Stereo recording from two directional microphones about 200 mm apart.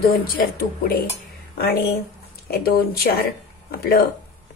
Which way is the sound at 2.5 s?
50° left (ahead or behind).